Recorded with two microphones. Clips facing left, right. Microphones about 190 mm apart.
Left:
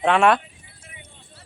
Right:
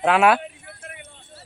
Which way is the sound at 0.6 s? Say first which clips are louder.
Right 8 dB; 60° right (ahead or behind).